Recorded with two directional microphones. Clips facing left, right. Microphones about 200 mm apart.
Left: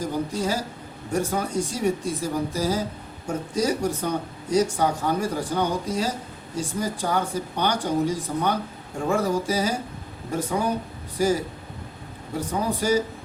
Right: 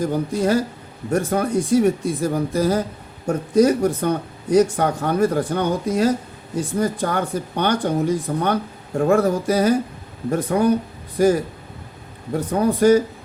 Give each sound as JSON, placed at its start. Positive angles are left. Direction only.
{"t": 0.0, "sound": "speech", "side_deg": -60}
{"t": 12.5, "sound": "speech", "side_deg": -55}